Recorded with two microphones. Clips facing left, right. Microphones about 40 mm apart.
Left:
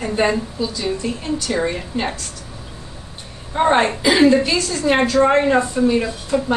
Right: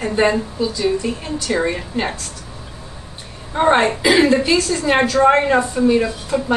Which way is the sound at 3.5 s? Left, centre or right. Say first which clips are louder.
Right 1 dB; centre.